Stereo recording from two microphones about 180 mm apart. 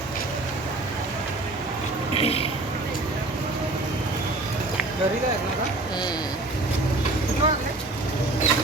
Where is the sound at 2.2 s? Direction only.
35° left (ahead or behind).